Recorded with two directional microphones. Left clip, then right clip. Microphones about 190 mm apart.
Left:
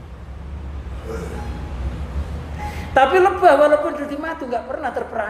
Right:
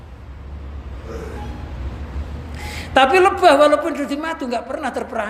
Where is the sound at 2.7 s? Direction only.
45° right (ahead or behind).